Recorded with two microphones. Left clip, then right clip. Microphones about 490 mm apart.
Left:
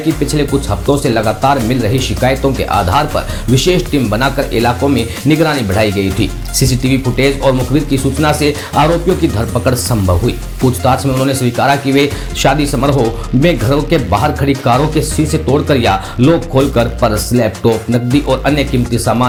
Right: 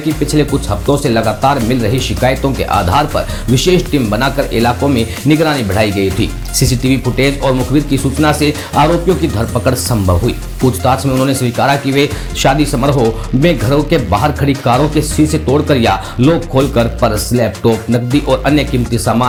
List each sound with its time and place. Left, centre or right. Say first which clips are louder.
0.3 s speech: right 1 dB; centre